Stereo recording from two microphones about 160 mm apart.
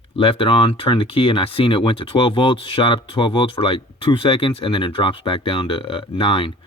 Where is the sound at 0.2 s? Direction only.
35° left (ahead or behind).